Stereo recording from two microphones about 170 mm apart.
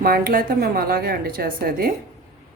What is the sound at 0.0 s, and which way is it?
Speech, 60° right (ahead or behind).